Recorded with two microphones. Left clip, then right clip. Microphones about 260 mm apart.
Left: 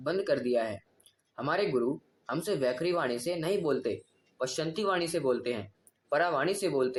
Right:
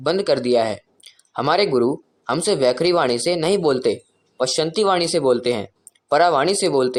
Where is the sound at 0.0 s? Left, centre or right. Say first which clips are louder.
Right 11 dB; right.